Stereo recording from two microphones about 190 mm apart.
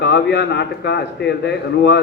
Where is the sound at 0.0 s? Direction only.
65° left (ahead or behind).